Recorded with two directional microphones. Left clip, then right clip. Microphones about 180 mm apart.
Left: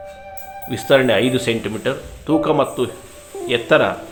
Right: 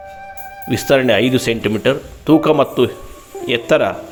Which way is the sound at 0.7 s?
35° right (ahead or behind).